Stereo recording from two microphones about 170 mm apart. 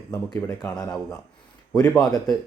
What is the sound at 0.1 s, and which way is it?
Speech, 20° left (ahead or behind).